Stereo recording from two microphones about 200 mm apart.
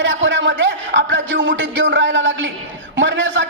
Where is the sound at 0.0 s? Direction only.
65° right (ahead or behind).